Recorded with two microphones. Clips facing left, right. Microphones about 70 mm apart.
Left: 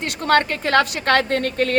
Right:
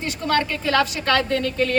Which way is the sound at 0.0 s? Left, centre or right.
Left.